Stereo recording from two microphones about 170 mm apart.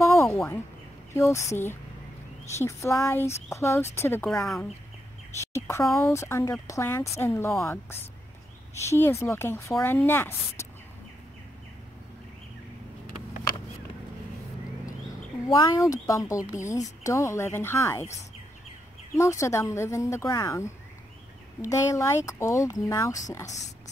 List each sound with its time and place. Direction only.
0.0 s a sound: 15° left (ahead or behind)
1.1 s speech: 15° left (ahead or behind)
5.4 s chirp: 15° left (ahead or behind)
5.9 s speech: 15° left (ahead or behind)
15.6 s a woman's voice: 20° left (ahead or behind)